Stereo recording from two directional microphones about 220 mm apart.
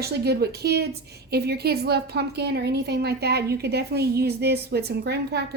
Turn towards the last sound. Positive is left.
turn(degrees=-50)  # may be behind; listen again after turning